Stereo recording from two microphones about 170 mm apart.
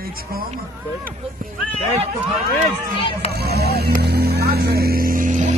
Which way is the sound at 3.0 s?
30° left (ahead or behind).